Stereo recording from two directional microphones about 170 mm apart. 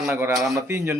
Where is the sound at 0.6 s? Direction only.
15° right (ahead or behind).